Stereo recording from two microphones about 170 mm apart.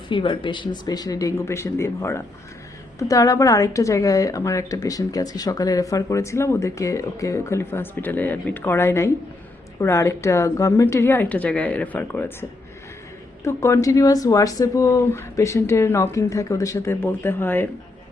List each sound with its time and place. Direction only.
0.1 s speech: 30° left (ahead or behind); by 17.7 s 10° left (ahead or behind)